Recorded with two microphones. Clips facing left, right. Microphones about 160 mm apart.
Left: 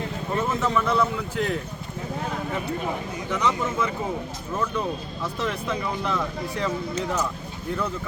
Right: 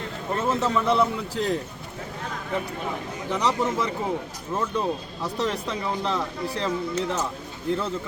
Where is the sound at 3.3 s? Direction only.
35° right (ahead or behind).